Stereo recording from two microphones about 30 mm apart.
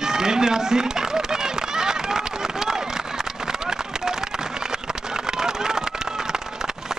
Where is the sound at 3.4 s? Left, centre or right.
Right.